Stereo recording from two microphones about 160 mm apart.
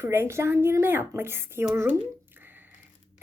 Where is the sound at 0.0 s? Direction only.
15° right (ahead or behind).